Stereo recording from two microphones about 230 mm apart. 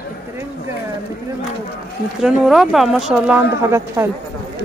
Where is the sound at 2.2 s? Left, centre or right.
Centre.